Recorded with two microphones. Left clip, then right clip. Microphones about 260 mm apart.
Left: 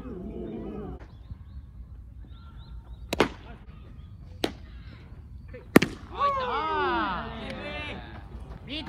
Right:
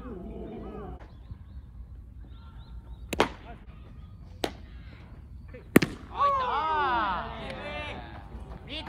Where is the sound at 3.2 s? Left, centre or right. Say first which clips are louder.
Left 1 dB; right.